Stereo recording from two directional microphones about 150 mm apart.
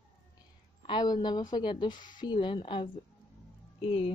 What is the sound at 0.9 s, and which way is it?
A woman's voice, 30° left (ahead or behind).